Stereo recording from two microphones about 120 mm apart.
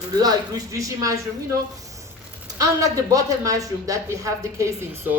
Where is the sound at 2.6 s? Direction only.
30° right (ahead or behind).